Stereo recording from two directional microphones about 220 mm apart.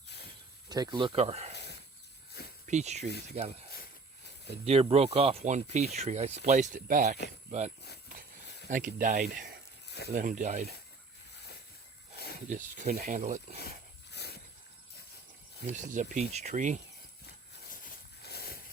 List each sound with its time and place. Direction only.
0.7 s speech: 20° right (ahead or behind)
2.6 s speech: 30° right (ahead or behind)
4.6 s speech: 25° right (ahead or behind)
8.7 s speech: 35° right (ahead or behind)
12.5 s speech: 35° right (ahead or behind)
13.6 s a sound: 45° left (ahead or behind)
15.6 s speech: 35° right (ahead or behind)
17.7 s a sound: 45° left (ahead or behind)